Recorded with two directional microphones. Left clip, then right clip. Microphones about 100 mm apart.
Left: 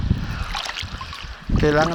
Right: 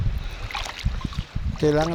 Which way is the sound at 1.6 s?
15° left (ahead or behind).